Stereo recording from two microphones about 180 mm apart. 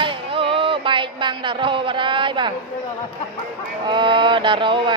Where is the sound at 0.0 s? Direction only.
30° right (ahead or behind).